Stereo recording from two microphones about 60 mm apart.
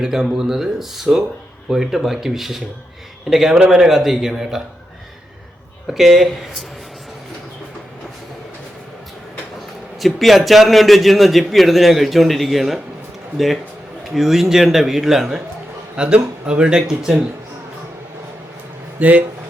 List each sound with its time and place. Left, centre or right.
0.0 s a man's voice: centre
5.9 s a man's voice: centre
10.0 s a man's voice: centre
16.0 s speech: centre
18.9 s speech: right